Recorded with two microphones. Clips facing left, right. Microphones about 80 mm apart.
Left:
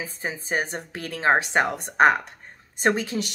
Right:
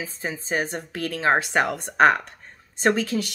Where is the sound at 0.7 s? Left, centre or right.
Left.